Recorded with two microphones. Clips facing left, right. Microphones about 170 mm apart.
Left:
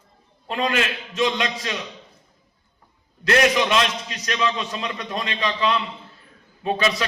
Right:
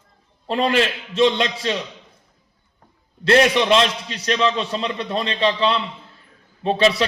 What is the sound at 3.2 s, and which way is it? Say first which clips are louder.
A man's voice: right 3 dB; 30° right (ahead or behind).